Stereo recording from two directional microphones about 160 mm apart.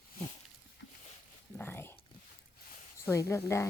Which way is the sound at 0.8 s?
90° left.